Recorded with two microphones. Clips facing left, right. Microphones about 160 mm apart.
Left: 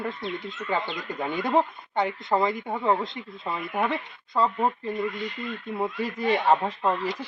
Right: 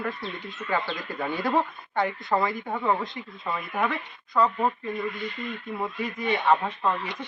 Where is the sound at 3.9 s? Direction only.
25° left (ahead or behind).